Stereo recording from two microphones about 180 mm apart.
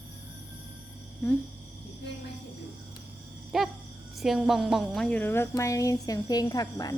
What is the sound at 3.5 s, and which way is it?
Cricket, centre (ahead or behind).